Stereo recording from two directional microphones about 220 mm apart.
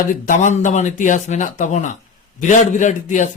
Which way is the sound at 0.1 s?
35° left (ahead or behind).